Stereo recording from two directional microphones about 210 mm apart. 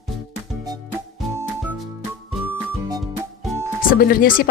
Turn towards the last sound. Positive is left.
turn(degrees=45)  # may be behind; listen again after turning